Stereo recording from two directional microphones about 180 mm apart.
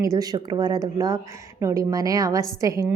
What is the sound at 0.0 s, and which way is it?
A woman's voice, 20° right (ahead or behind).